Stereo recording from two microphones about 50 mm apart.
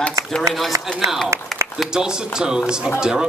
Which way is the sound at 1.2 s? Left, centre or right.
Right.